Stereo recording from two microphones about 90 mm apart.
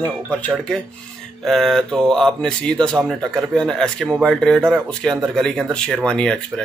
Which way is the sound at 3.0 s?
Centre (ahead or behind).